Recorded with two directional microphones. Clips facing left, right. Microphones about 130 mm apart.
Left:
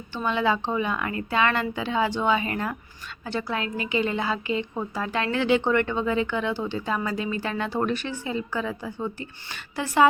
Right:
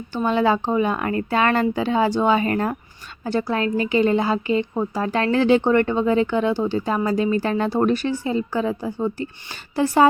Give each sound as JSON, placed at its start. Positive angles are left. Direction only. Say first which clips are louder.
{"t": 0.1, "sound": "a woman's voice", "louder": "right 5 dB", "side_deg": -40}